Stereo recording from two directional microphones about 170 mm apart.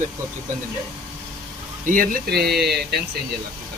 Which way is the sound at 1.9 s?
60° right (ahead or behind).